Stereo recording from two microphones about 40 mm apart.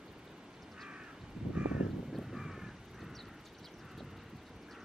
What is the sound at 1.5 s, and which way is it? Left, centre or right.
Crow, right.